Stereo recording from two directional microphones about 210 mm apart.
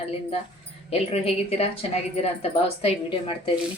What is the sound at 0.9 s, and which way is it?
Speech, 30° left (ahead or behind).